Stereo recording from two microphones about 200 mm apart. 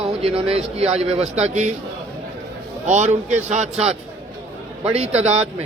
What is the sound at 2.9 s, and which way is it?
Speech, 35° right (ahead or behind).